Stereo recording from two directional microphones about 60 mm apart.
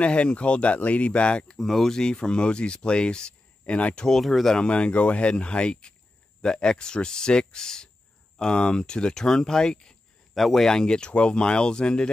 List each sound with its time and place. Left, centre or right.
0.0 s speech: centre
1.6 s speech: centre
4.2 s speech: centre
4.6 s speech: centre